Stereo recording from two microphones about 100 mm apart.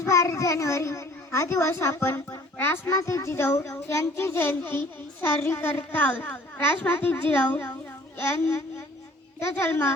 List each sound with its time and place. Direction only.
0.0 s a child's voice: 30° left (ahead or behind)